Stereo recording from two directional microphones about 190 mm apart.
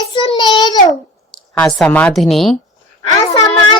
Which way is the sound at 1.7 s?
5° left (ahead or behind).